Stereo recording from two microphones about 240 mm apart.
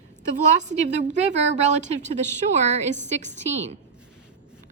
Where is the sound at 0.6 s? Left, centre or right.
Right.